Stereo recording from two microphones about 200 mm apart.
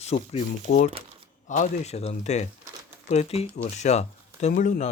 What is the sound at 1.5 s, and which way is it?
Speech, 35° left (ahead or behind).